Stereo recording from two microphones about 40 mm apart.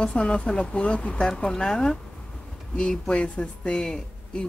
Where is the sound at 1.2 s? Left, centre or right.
Centre.